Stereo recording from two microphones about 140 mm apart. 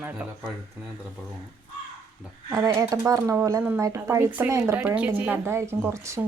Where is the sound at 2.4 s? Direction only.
25° right (ahead or behind).